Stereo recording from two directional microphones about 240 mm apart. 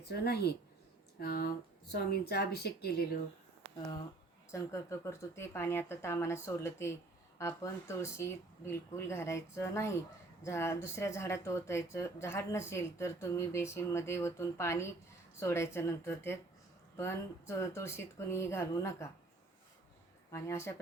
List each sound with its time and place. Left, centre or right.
0.0 s speech: left
4.5 s speech: centre
20.3 s speech: centre